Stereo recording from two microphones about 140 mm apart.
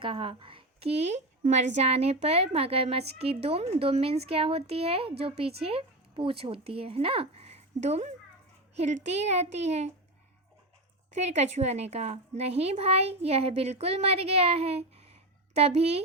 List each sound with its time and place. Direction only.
0.0 s a woman's voice: 35° right (ahead or behind)
11.1 s a woman's voice: 50° right (ahead or behind)